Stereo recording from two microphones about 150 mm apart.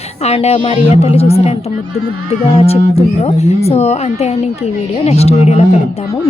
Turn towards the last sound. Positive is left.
turn(degrees=45)  # may be behind; listen again after turning